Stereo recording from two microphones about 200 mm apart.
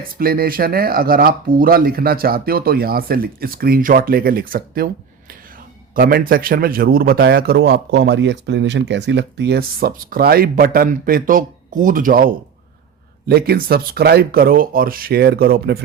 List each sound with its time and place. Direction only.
0.2 s a man's voice: 45° right (ahead or behind)
5.9 s a man's voice: 45° right (ahead or behind)